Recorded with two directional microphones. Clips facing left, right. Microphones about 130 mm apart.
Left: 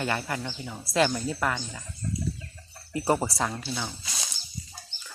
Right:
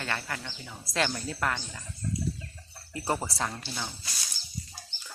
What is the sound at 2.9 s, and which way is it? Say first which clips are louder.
Speech: left 5 dB; 15° left (ahead or behind).